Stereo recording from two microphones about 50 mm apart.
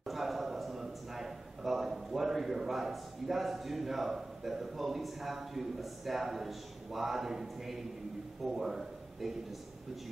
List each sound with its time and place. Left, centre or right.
0.0 s a man's voice: centre